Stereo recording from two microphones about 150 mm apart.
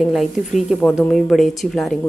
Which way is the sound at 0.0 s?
Centre (ahead or behind).